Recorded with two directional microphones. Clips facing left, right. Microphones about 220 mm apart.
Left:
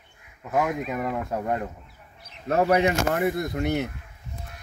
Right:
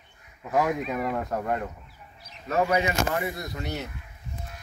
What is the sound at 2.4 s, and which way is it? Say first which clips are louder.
Speech: left 4 dB; 60° left (ahead or behind).